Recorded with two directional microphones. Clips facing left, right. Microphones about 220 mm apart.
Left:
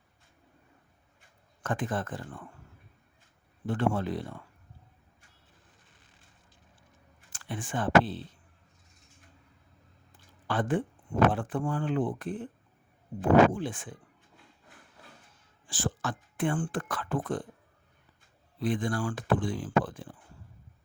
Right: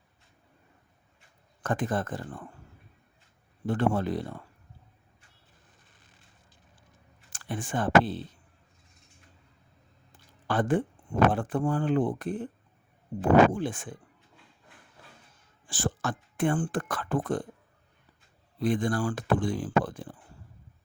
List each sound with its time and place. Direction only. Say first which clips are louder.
1.6 s speech: right 3 dB; 40° right (ahead or behind)
3.7 s speech: right 2 dB; 40° right (ahead or behind)
7.3 s speech: right 3 dB; 40° right (ahead or behind)
10.4 s speech: right 3 dB; 45° right (ahead or behind)
13.5 s speech: right 3 dB; 45° right (ahead or behind)
15.6 s speech: right 2 dB; 45° right (ahead or behind)
18.6 s speech: right 3 dB; 45° right (ahead or behind)